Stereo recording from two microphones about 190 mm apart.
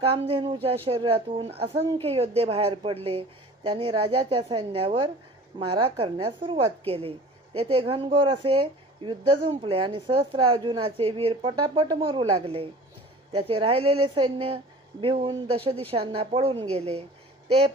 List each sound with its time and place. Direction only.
0.0 s a woman's voice: 30° right (ahead or behind)